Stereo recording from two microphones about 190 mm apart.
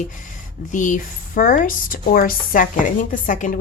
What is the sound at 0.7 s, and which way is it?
A woman's voice, 40° left (ahead or behind).